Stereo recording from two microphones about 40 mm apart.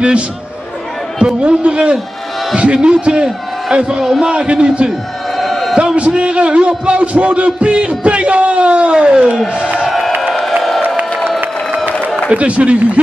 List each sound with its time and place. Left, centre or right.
1.2 s speech: right
4.0 s a man's voice: centre
4.3 s speech: right
5.4 s a sound: centre
5.8 s speech: right
9.8 s music: centre
12.3 s a man's voice: right